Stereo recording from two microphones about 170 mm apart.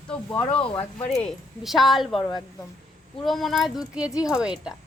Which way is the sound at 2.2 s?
25° left (ahead or behind).